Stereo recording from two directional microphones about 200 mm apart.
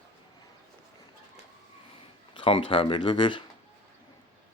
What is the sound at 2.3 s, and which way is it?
Speech, 25° left (ahead or behind).